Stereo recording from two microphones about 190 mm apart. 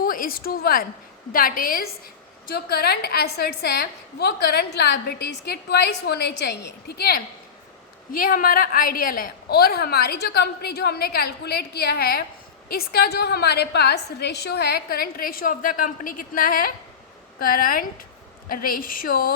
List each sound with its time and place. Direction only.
0.0 s a woman's voice: 50° left (ahead or behind)